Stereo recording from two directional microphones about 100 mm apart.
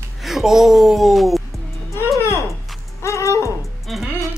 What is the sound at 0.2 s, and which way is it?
Speech, 5° right (ahead or behind).